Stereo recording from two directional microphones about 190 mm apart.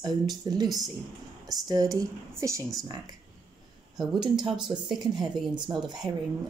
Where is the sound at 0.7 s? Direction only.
Centre (ahead or behind).